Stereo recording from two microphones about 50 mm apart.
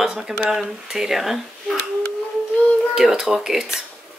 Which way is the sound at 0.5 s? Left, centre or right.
Centre.